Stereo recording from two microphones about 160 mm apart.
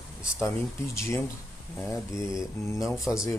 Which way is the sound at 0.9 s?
15° left (ahead or behind).